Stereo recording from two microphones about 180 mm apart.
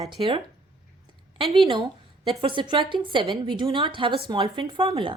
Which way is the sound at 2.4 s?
25° right (ahead or behind).